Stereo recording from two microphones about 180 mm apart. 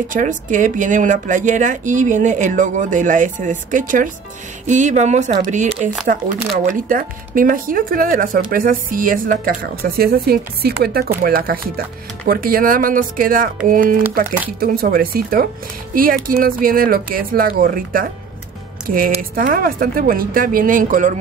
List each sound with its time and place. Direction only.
0.1 s speech: 45° right (ahead or behind)
6.7 s speech: 50° right (ahead or behind)